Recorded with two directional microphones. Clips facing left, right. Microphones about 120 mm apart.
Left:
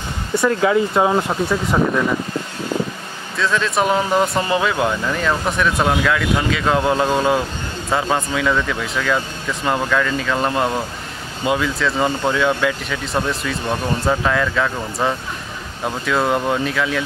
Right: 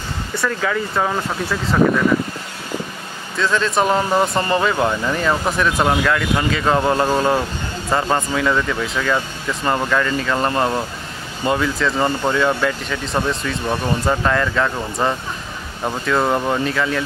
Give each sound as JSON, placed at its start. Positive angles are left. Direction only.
{"t": 0.4, "sound": "speech", "side_deg": 20}
{"t": 3.3, "sound": "speech", "side_deg": 0}